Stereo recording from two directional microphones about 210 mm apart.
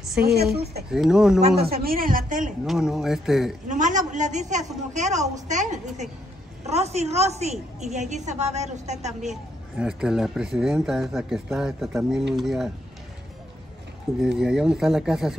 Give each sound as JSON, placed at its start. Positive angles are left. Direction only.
{"t": 0.2, "sound": "a woman's voice", "side_deg": -50}
{"t": 0.9, "sound": "speech", "side_deg": -5}
{"t": 1.6, "sound": "a woman's voice", "side_deg": -45}
{"t": 2.6, "sound": "speech", "side_deg": 0}
{"t": 3.6, "sound": "a woman's voice", "side_deg": -35}
{"t": 9.3, "sound": "speech", "side_deg": -5}
{"t": 14.2, "sound": "speech", "side_deg": -5}